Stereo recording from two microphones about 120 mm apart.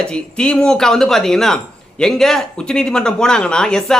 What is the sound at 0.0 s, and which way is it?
Speech, 5° left (ahead or behind).